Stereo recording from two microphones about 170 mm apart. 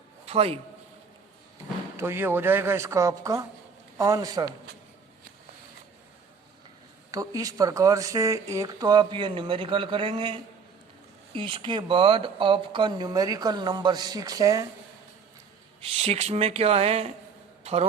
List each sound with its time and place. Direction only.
0.3 s speech: 35° right (ahead or behind)
2.0 s a woman's voice: 15° right (ahead or behind)
7.1 s speech: 20° right (ahead or behind)
11.3 s speech: 30° right (ahead or behind)
15.8 s speech: 35° right (ahead or behind)
17.6 s a sound: 40° right (ahead or behind)